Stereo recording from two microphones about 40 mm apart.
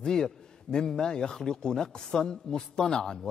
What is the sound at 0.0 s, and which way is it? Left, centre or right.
A man's voice, centre.